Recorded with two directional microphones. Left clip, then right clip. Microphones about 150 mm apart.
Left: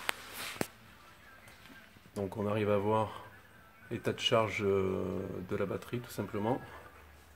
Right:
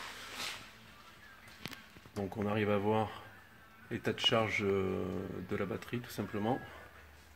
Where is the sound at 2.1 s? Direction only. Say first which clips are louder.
Left 1 dB; 5° left (ahead or behind).